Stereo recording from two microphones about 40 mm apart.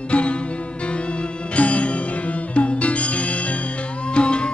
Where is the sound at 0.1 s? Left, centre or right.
Left.